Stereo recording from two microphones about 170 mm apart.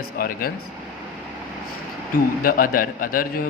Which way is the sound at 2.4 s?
55° left (ahead or behind).